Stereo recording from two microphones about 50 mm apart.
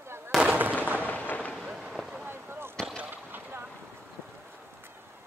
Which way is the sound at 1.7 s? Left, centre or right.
Centre.